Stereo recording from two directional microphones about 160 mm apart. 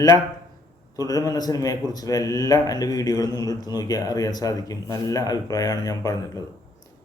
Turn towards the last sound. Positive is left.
turn(degrees=25)  # may be behind; listen again after turning